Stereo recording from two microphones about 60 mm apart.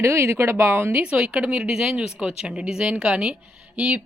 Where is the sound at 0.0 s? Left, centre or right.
Right.